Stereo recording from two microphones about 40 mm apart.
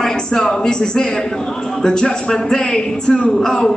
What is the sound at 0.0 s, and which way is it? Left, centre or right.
A man's voice, centre.